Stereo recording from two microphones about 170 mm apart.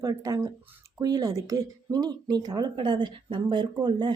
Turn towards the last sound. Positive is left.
turn(degrees=-25)  # may be behind; listen again after turning